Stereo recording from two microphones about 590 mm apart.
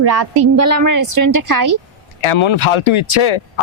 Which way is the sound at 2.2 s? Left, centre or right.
Left.